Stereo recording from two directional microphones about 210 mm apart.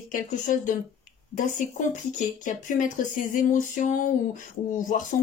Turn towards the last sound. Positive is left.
turn(degrees=40)  # may be behind; listen again after turning